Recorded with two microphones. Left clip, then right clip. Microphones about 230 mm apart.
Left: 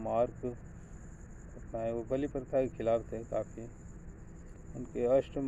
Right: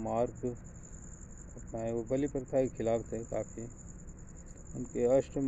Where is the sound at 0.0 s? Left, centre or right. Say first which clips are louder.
Left 1 dB; right.